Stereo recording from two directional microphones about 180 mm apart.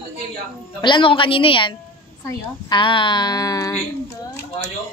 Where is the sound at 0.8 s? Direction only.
25° left (ahead or behind).